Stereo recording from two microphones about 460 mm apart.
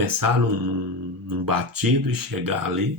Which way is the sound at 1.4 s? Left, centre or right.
Right.